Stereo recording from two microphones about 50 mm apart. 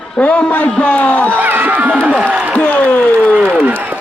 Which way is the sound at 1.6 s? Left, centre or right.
Right.